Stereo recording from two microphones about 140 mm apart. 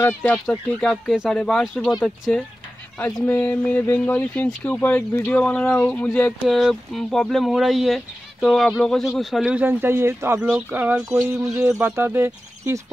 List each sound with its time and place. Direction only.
0.0 s speech: 10° left (ahead or behind)
3.3 s speech: 10° left (ahead or behind)
6.4 s speech: centre (ahead or behind); by 12.8 s 20° right (ahead or behind)